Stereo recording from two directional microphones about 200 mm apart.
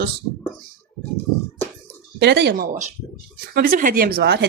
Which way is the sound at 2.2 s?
55° right (ahead or behind).